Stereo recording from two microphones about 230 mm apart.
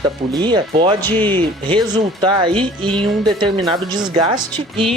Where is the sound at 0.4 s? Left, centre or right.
Right.